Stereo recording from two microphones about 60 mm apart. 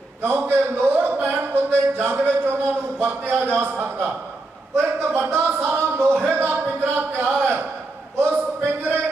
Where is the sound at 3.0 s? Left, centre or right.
Right.